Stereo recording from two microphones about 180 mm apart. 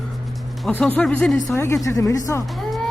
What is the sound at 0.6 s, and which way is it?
Speech, 5° left (ahead or behind).